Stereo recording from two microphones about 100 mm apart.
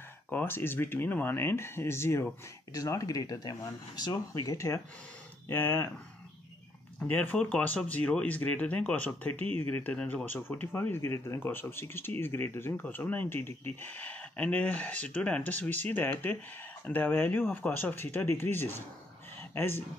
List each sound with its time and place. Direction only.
0.3 s speech: 20° left (ahead or behind)
7.1 s speech: 15° left (ahead or behind)